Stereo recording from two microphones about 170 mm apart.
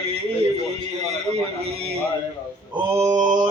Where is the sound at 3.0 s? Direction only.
45° right (ahead or behind).